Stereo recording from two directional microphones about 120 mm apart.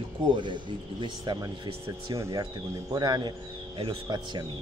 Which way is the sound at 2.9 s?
35° right (ahead or behind).